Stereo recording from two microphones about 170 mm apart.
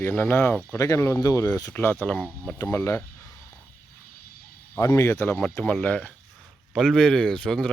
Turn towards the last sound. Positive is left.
turn(degrees=5)  # may be behind; listen again after turning